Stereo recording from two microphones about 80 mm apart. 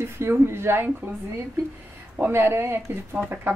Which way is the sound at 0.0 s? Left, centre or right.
Right.